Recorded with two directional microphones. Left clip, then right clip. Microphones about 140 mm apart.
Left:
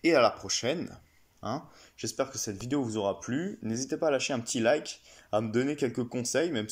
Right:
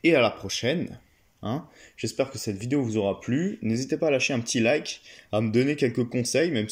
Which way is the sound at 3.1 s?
55° left (ahead or behind).